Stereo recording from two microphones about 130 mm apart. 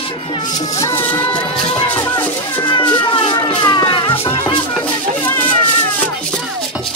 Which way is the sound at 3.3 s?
30° left (ahead or behind).